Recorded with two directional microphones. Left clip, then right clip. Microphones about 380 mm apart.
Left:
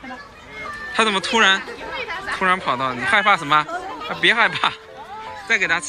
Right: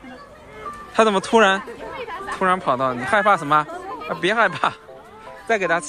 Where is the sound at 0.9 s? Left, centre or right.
Centre.